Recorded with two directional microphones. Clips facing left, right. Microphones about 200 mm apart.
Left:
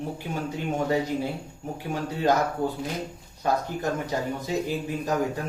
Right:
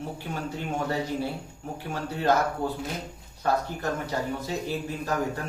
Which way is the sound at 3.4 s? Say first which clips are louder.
Left 1 dB; 15° left (ahead or behind).